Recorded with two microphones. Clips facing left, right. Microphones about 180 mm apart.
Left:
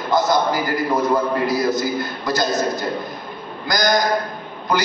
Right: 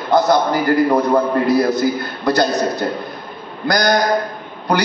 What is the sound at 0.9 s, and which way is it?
A man's voice, 60° right (ahead or behind).